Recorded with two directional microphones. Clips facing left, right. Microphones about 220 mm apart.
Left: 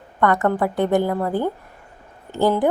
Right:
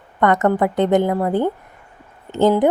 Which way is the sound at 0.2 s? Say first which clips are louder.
Right 3 dB; 20° right (ahead or behind).